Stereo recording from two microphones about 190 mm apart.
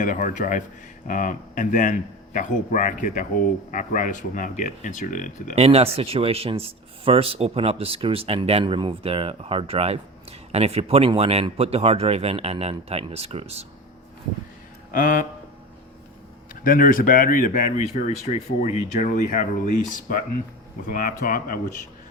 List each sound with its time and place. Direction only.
0.0 s speech: 40° left (ahead or behind)
5.5 s speech: 30° right (ahead or behind)
14.9 s speech: 45° left (ahead or behind)
16.6 s speech: 45° left (ahead or behind)
20.8 s speech: 45° left (ahead or behind)